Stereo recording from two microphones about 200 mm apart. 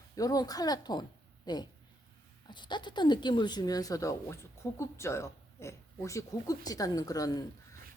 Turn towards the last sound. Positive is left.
turn(degrees=20)  # may be behind; listen again after turning